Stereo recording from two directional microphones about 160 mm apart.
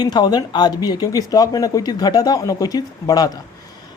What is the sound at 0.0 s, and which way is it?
Speech, 25° left (ahead or behind).